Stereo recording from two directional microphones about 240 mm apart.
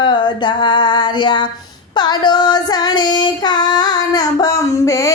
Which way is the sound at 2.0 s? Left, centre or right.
Centre.